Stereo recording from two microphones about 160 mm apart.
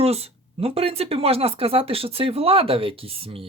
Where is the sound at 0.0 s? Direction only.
40° right (ahead or behind).